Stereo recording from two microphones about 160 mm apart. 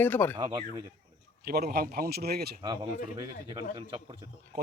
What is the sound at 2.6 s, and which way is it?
Speech, 25° right (ahead or behind).